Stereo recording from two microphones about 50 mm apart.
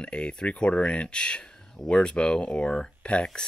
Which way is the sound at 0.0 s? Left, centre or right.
Centre.